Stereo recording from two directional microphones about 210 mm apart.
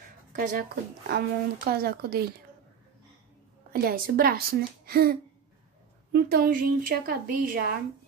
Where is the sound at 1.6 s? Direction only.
45° right (ahead or behind).